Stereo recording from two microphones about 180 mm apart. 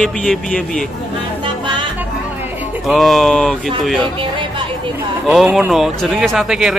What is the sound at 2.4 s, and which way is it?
Music, 10° right (ahead or behind).